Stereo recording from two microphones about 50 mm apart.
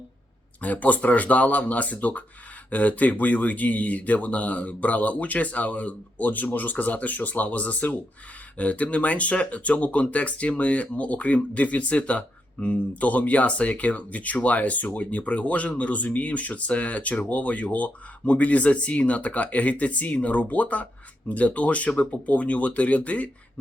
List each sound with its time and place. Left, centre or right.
0.6 s speech: left